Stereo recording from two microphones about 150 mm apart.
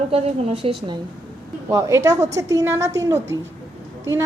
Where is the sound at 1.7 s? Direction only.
20° right (ahead or behind).